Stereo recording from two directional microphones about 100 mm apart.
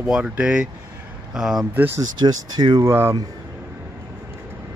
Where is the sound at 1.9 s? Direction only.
40° right (ahead or behind).